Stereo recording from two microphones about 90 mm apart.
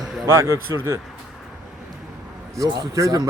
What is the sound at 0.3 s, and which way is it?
Speech, 35° right (ahead or behind).